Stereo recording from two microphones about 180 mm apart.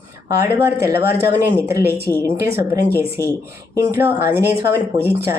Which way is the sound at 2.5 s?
15° right (ahead or behind).